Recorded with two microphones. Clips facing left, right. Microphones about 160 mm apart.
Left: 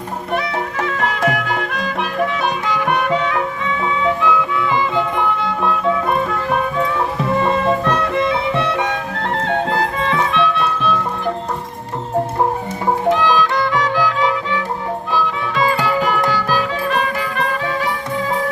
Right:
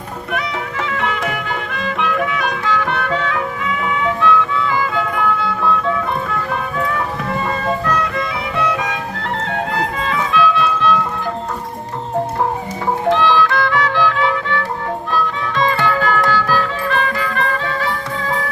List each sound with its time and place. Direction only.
0.3 s music: 40° left (ahead or behind)
4.2 s music: 15° left (ahead or behind)
7.9 s music: 25° left (ahead or behind)
13.1 s music: 15° left (ahead or behind)